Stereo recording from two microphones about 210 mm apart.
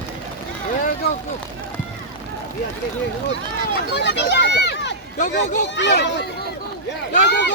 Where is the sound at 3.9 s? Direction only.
55° left (ahead or behind).